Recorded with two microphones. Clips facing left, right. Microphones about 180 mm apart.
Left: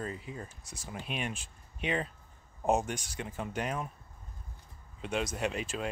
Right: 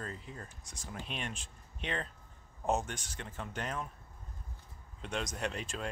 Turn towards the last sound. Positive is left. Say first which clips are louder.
# left 4 dB
turn(degrees=5)  # may be behind; listen again after turning